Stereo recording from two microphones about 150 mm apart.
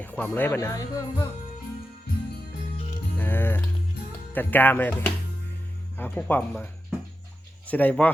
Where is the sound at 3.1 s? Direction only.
15° left (ahead or behind).